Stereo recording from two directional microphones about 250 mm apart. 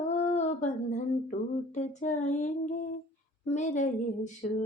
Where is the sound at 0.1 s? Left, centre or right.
Left.